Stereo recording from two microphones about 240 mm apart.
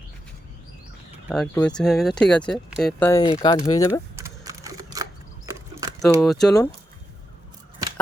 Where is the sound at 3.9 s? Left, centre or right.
Centre.